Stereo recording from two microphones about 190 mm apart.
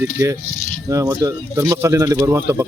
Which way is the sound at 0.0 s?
15° right (ahead or behind).